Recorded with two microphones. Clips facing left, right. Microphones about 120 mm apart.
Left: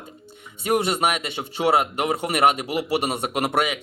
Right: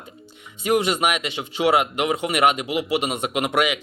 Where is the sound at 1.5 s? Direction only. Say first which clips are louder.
Right 1 dB; 30° left (ahead or behind).